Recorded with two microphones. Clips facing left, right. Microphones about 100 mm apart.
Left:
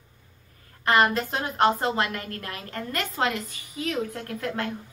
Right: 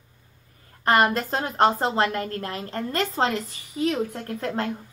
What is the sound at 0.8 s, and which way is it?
Speech, 45° right (ahead or behind).